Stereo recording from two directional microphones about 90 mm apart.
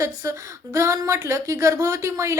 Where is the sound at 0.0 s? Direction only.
35° right (ahead or behind).